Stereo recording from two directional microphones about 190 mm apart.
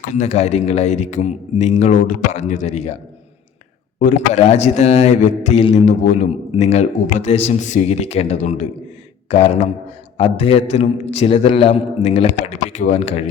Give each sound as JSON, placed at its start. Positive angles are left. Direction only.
{"t": 0.0, "sound": "a man's voice", "side_deg": 40}
{"t": 4.0, "sound": "a man's voice", "side_deg": 40}